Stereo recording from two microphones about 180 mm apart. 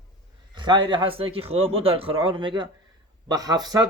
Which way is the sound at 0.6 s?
25° right (ahead or behind).